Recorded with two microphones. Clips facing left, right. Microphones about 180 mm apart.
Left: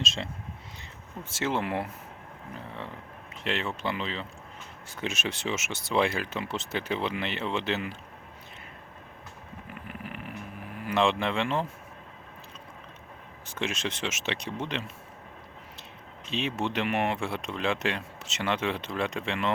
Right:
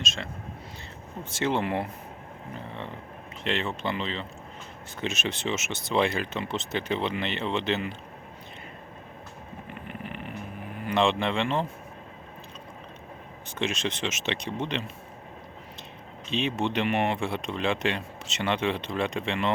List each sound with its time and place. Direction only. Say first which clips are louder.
0.0 s speech: left 1 dB; 30° left (ahead or behind)
1.2 s speech: right 3 dB; 5° left (ahead or behind)
3.4 s speech: right 2 dB; 5° left (ahead or behind)
9.6 s vehicle: right 2 dB; 5° left (ahead or behind)
10.8 s speech: right 1 dB; 5° left (ahead or behind)
13.6 s speech: right 2 dB; 5° left (ahead or behind)
16.3 s speech: right 3 dB; 5° left (ahead or behind)